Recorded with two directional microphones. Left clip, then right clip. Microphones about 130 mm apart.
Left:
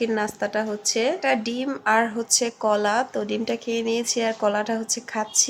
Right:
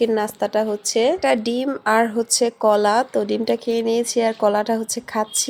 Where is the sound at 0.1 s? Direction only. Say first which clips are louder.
Right 4 dB; 30° right (ahead or behind).